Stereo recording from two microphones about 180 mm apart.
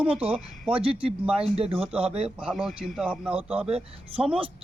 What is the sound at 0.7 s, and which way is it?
Speech, 30° right (ahead or behind).